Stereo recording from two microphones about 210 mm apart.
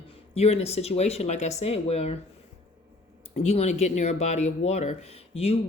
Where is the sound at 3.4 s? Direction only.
30° left (ahead or behind).